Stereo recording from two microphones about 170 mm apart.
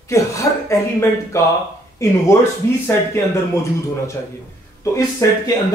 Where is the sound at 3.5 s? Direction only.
15° left (ahead or behind).